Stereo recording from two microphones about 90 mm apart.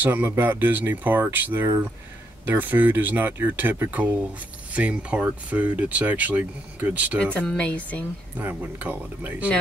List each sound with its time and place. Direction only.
0.0 s speech: 25° right (ahead or behind)
7.3 s speech: 15° left (ahead or behind)
8.4 s speech: 20° right (ahead or behind)